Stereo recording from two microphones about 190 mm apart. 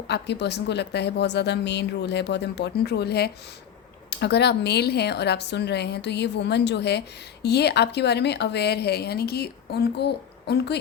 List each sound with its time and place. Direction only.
0.1 s speech: 65° left (ahead or behind)